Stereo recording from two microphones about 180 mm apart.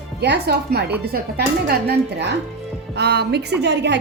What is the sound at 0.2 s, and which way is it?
A woman's voice, 65° right (ahead or behind).